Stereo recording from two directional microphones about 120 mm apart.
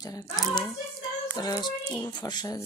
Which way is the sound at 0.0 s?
30° left (ahead or behind).